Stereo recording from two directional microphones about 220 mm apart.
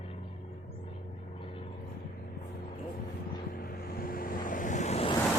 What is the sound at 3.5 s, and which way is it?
Vehicle, 45° left (ahead or behind).